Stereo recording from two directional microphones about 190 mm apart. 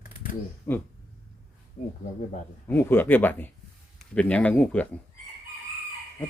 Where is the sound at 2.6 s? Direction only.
10° left (ahead or behind).